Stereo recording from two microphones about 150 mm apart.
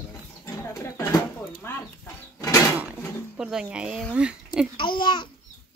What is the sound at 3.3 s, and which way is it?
Speech, 5° right (ahead or behind).